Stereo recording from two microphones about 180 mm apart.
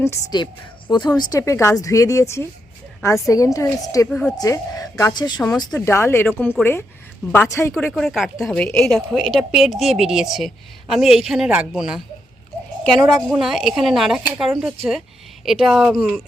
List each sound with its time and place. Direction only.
0.0 s a woman's voice: 20° left (ahead or behind)
4.1 s a woman's voice: 5° left (ahead or behind)
4.4 s a woman's voice: 20° left (ahead or behind)
7.8 s a woman's voice: 5° left (ahead or behind)